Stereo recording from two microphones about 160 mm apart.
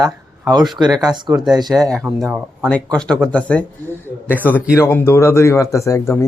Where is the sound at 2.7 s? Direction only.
5° left (ahead or behind).